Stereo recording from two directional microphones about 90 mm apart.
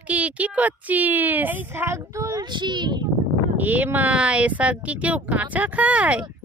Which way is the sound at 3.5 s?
20° right (ahead or behind).